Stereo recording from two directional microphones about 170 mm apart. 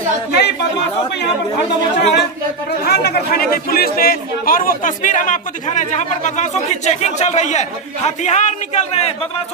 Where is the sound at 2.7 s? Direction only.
70° left (ahead or behind).